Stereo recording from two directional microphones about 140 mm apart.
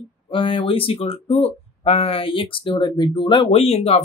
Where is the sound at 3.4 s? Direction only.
50° left (ahead or behind).